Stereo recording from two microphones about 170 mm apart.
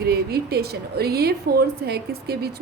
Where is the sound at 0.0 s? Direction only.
65° right (ahead or behind).